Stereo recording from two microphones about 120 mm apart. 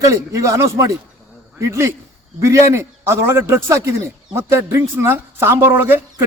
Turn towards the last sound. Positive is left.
turn(degrees=-15)  # may be behind; listen again after turning